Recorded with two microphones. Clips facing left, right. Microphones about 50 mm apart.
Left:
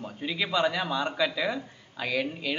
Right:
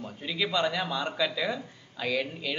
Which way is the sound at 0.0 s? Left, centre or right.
Centre.